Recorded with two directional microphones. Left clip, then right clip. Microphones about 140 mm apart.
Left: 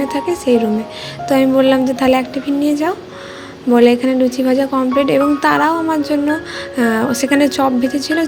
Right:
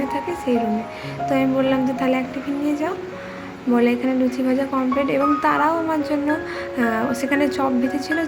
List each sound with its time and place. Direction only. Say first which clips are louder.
0.1 s music: left 7 dB; 30° left (ahead or behind)
3.7 s speech: left 8 dB; 30° left (ahead or behind)